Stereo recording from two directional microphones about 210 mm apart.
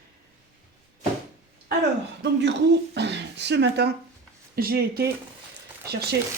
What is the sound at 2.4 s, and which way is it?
Speech, 55° right (ahead or behind).